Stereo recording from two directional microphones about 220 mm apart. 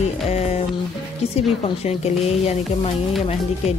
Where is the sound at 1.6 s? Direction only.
30° left (ahead or behind).